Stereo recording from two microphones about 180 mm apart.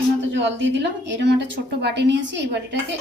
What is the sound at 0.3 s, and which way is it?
A woman's voice, 80° right.